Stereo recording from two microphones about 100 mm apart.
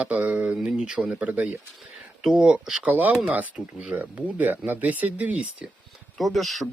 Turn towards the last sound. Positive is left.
turn(degrees=0)  # may be behind; listen again after turning